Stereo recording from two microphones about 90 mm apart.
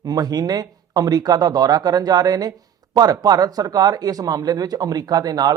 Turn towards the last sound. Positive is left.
turn(degrees=-45)  # may be behind; listen again after turning